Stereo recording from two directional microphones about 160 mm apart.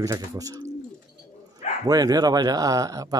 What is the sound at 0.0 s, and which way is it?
Speech, 20° right (ahead or behind).